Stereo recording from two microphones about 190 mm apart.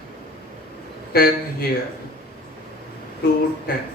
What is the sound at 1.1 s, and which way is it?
Speech, 50° left (ahead or behind).